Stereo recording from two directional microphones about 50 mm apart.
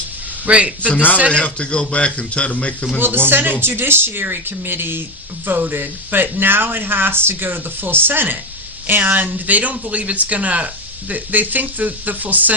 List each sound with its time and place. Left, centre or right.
0.4 s a man's voice: right
1.3 s a man's voice: left
3.2 s speech: right